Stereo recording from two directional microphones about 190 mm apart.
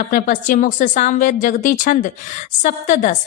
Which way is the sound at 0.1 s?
45° left (ahead or behind).